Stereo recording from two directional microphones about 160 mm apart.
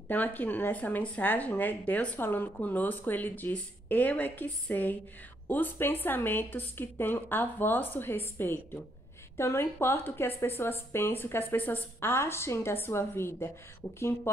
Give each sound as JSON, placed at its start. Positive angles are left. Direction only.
{"t": 0.1, "sound": "speech", "side_deg": 10}